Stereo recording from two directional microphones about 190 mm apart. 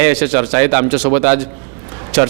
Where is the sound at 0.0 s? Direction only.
10° right (ahead or behind).